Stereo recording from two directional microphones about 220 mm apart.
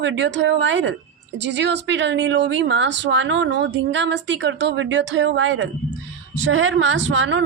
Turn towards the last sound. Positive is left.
turn(degrees=-60)  # may be behind; listen again after turning